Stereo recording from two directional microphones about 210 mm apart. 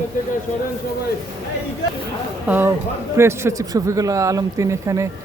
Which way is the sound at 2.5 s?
10° right (ahead or behind).